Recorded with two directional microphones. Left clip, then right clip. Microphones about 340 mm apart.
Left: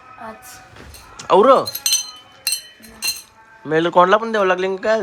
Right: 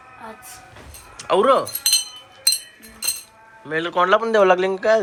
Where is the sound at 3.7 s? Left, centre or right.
Centre.